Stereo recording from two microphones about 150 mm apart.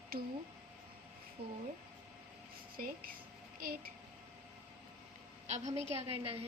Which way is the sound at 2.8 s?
70° right (ahead or behind).